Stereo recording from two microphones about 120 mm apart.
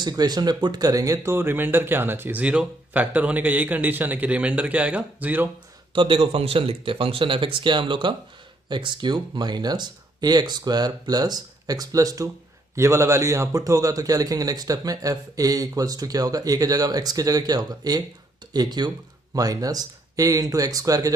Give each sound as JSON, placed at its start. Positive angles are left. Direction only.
{"t": 0.0, "sound": "speech", "side_deg": -35}
{"t": 5.9, "sound": "a man's voice", "side_deg": -50}